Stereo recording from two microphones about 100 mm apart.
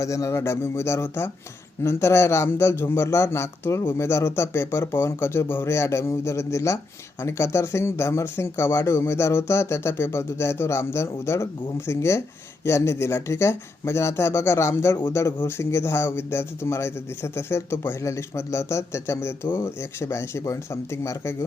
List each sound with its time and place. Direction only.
0.0 s speech: 30° left (ahead or behind)